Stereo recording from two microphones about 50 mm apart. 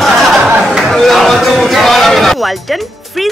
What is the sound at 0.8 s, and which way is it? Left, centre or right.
Speech, centre.